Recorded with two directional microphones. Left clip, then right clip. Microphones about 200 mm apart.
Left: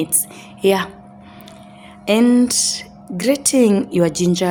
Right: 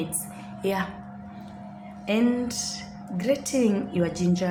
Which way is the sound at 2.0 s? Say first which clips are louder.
Left 10 dB; 60° left (ahead or behind).